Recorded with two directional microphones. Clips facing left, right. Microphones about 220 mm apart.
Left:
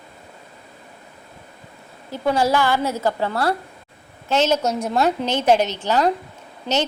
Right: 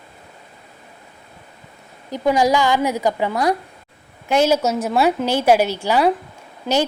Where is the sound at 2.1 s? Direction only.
15° right (ahead or behind).